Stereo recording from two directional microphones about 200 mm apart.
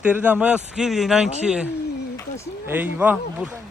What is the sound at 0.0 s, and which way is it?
Speech, 10° right (ahead or behind).